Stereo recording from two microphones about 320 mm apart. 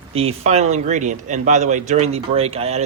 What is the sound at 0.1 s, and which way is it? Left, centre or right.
Speech, centre.